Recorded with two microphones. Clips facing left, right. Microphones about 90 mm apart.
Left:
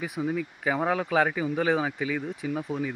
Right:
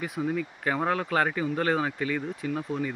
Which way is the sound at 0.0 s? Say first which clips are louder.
Even; 5° left (ahead or behind).